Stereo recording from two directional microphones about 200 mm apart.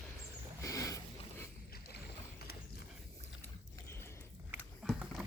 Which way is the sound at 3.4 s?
10° left (ahead or behind).